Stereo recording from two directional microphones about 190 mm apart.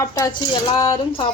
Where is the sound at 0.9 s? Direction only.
30° left (ahead or behind).